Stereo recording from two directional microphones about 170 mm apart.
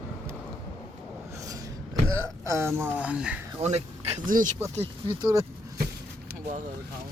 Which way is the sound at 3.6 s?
40° right (ahead or behind).